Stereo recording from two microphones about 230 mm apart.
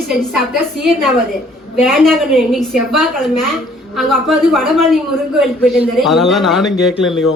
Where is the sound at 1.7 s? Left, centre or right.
Centre.